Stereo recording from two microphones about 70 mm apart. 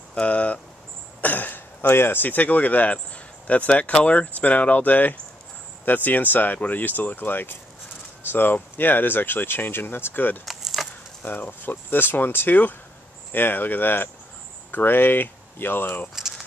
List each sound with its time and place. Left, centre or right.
0.1 s speech: centre
10.4 s a sound: centre
11.2 s speech: left
16.2 s keys jangling: centre